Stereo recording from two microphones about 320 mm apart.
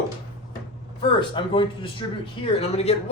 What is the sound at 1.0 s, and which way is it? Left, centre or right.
Speech, centre.